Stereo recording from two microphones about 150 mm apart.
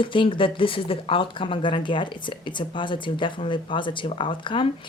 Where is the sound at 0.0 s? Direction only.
35° left (ahead or behind).